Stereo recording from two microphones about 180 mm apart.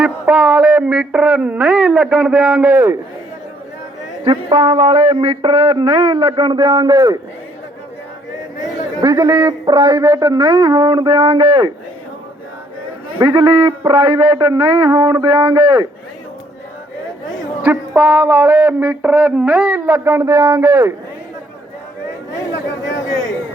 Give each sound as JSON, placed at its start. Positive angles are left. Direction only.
{"t": 0.0, "sound": "speech", "side_deg": -5}
{"t": 4.2, "sound": "a man's voice", "side_deg": -25}
{"t": 8.6, "sound": "a man's voice", "side_deg": -15}
{"t": 13.2, "sound": "a man's voice", "side_deg": -20}
{"t": 17.6, "sound": "a sound", "side_deg": -10}